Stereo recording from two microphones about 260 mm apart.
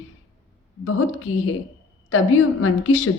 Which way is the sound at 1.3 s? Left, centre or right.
Left.